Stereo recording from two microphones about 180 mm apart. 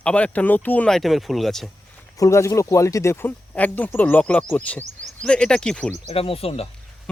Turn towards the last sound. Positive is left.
turn(degrees=35)  # may be behind; listen again after turning